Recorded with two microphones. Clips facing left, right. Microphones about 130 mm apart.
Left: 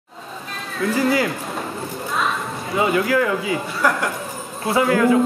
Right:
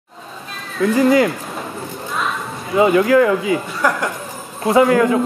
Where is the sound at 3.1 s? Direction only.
25° right (ahead or behind).